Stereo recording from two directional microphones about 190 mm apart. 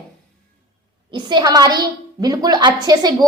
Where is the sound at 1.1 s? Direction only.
25° right (ahead or behind).